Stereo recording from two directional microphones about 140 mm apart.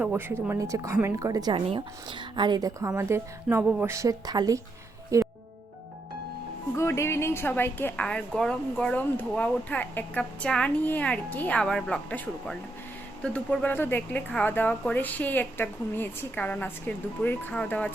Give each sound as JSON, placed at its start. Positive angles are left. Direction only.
{"t": 0.0, "sound": "a woman's voice", "side_deg": -15}
{"t": 6.7, "sound": "a woman's voice", "side_deg": 20}